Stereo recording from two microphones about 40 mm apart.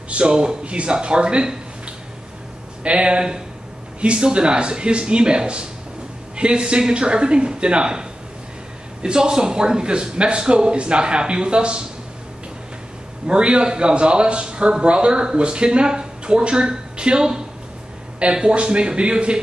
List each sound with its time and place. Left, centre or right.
0.1 s a man's voice: right
2.8 s a man's voice: right
13.3 s a man's voice: right